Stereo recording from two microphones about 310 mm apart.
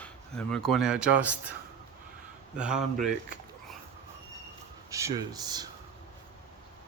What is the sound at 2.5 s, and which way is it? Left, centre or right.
Speech, centre.